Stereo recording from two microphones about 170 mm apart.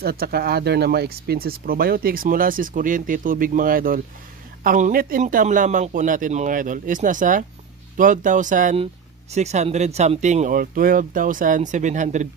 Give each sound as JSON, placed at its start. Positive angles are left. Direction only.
{"t": 0.0, "sound": "speech", "side_deg": -65}